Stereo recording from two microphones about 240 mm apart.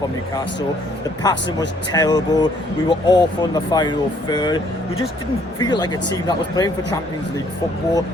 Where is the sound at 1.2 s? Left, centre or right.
Centre.